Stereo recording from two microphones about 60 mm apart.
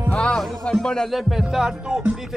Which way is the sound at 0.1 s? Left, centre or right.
Centre.